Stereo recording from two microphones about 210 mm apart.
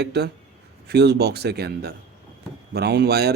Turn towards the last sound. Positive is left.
turn(degrees=-50)  # may be behind; listen again after turning